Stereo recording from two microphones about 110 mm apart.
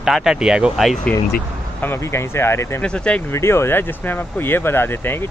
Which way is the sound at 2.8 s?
10° left (ahead or behind).